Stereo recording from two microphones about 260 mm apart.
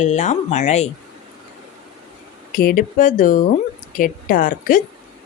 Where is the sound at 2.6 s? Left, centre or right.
Left.